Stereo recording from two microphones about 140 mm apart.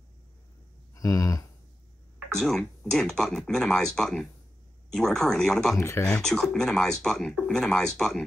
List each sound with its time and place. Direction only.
0.9 s a sound: 25° left (ahead or behind)
2.3 s speech: 5° left (ahead or behind)
5.8 s speech: 20° left (ahead or behind)
6.2 s speech: 5° left (ahead or behind)